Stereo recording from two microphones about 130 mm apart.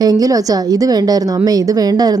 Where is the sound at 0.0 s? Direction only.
30° right (ahead or behind).